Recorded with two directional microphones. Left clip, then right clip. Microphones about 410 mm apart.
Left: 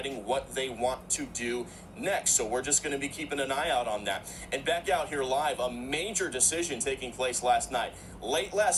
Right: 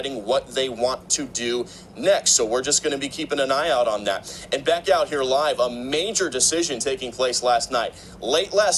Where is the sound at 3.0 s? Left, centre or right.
Right.